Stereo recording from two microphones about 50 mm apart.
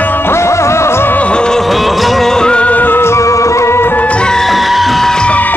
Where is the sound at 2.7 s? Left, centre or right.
Left.